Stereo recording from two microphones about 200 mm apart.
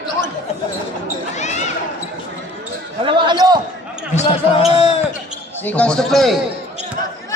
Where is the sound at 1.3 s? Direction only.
35° left (ahead or behind).